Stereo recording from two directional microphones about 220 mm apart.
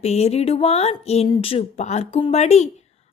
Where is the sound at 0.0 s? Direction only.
30° left (ahead or behind).